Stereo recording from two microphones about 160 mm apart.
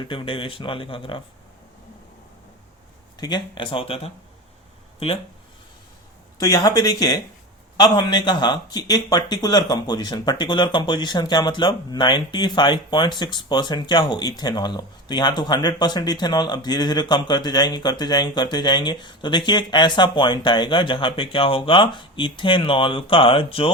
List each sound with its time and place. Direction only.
0.1 s speech: 35° left (ahead or behind)
3.2 s speech: 25° left (ahead or behind)
6.4 s speech: 20° left (ahead or behind)